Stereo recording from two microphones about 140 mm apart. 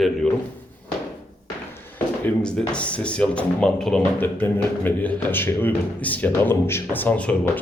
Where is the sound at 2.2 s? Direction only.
5° left (ahead or behind).